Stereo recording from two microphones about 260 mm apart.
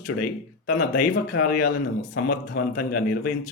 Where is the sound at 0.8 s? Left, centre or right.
Left.